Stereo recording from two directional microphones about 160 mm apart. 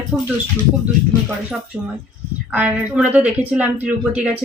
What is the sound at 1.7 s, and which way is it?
Speech, 15° right (ahead or behind).